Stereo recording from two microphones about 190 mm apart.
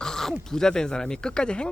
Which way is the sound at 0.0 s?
5° left (ahead or behind).